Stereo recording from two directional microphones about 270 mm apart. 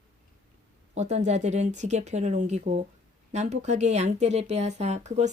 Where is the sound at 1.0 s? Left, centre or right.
Right.